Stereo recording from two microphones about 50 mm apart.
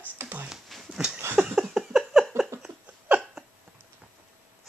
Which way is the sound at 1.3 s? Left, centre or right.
Right.